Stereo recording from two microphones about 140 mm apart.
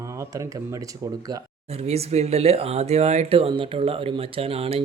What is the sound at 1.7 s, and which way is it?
Speech, 45° right (ahead or behind).